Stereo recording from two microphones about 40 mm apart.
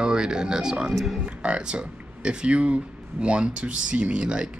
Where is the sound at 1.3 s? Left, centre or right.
Right.